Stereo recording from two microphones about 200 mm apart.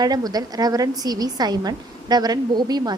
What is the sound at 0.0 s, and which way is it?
A woman's voice, 20° right (ahead or behind).